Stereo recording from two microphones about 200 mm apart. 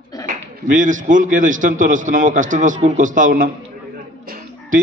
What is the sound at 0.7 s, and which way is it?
A man's voice, 40° right (ahead or behind).